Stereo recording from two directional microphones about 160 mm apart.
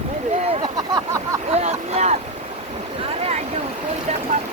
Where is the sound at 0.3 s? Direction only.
40° right (ahead or behind).